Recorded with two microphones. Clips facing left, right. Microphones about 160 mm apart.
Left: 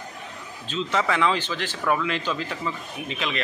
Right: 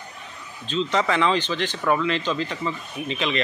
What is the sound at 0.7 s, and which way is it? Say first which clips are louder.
Speech: right 2 dB; 5° left (ahead or behind).